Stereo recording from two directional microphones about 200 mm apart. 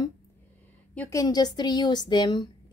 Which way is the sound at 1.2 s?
20° left (ahead or behind).